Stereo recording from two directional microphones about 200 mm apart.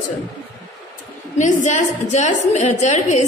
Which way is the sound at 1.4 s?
40° left (ahead or behind).